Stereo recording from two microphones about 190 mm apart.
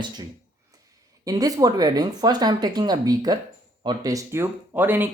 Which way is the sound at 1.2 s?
20° right (ahead or behind).